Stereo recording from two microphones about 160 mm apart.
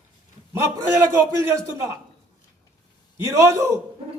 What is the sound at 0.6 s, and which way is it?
A man's voice, 20° right (ahead or behind).